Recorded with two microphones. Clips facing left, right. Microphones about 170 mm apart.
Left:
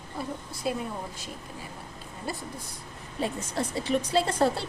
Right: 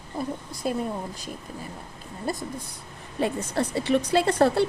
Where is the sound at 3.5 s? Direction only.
65° right (ahead or behind).